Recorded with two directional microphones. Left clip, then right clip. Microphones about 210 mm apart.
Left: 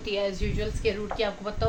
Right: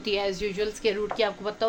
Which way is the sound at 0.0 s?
55° right (ahead or behind).